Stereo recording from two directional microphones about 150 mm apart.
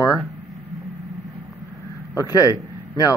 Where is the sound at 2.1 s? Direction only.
25° left (ahead or behind).